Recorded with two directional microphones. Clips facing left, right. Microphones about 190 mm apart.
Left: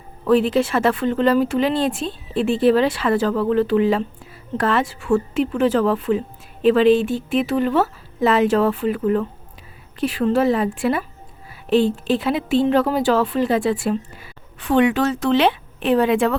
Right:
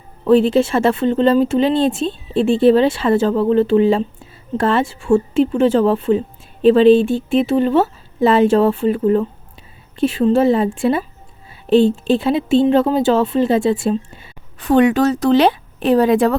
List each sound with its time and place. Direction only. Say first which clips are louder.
0.3 s speech: right 4 dB; 25° right (ahead or behind)
14.6 s speech: right 4 dB; 40° right (ahead or behind)